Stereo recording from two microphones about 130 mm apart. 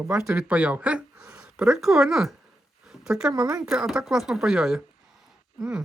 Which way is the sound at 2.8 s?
5° right (ahead or behind).